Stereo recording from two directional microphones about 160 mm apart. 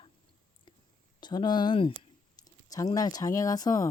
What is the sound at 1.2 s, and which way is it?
Speech, 30° left (ahead or behind).